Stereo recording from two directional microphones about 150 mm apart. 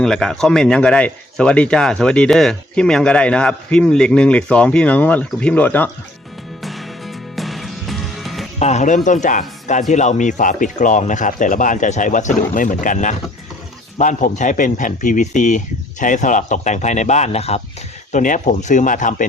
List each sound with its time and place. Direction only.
0.0 s speech: 5° left (ahead or behind)
6.6 s music: centre (ahead or behind)
8.5 s a man's voice: 50° left (ahead or behind)
18.1 s a man's voice: 55° left (ahead or behind)